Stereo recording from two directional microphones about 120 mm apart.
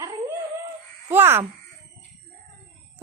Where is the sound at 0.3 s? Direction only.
20° right (ahead or behind).